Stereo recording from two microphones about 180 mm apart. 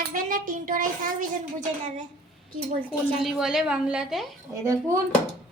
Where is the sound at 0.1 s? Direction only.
50° right (ahead or behind).